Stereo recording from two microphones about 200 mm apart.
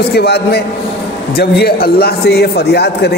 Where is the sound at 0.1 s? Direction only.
55° left (ahead or behind).